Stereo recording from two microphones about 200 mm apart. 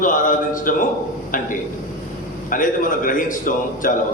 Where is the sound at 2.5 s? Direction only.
40° left (ahead or behind).